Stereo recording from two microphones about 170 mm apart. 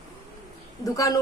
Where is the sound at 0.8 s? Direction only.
20° left (ahead or behind).